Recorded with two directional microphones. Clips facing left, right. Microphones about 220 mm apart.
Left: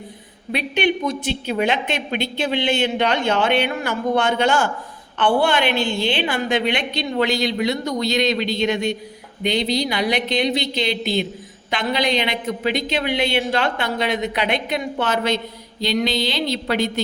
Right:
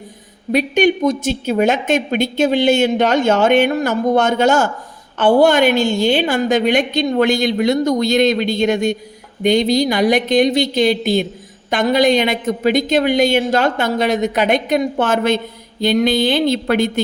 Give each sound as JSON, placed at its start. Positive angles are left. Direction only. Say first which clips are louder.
{"t": 0.5, "sound": "speech", "louder": "right 7 dB", "side_deg": -45}